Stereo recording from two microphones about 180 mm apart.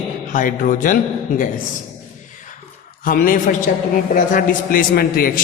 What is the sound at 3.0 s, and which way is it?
A man's voice, 50° left (ahead or behind).